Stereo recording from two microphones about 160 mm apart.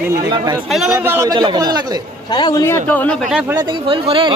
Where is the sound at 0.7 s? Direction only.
5° right (ahead or behind).